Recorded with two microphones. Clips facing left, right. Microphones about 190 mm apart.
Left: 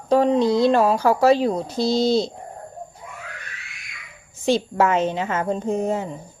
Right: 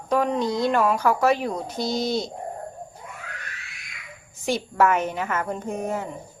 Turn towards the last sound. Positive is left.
turn(degrees=25)  # may be behind; listen again after turning